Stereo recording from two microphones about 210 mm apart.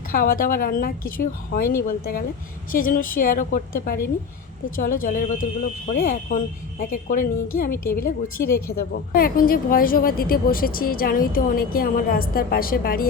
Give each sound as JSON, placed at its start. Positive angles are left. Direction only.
{"t": 0.1, "sound": "a woman's voice", "side_deg": 45}